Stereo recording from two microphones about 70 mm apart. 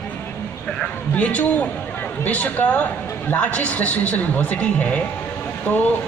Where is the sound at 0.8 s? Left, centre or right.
Left.